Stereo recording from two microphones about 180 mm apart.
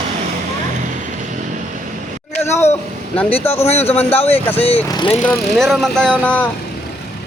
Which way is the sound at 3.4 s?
15° left (ahead or behind).